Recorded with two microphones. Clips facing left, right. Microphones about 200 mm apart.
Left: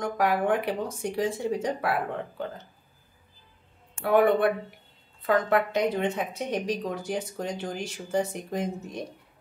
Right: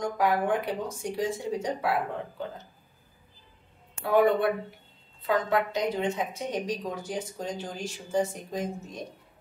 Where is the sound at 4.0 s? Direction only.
55° left (ahead or behind).